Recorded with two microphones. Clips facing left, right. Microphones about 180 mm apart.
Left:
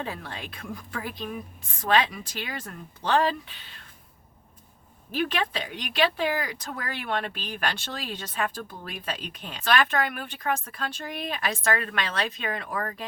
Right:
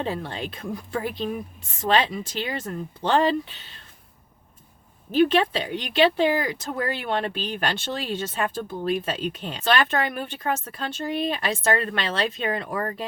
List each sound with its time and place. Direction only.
0.0 s speech: 25° right (ahead or behind)
5.1 s speech: 25° right (ahead or behind)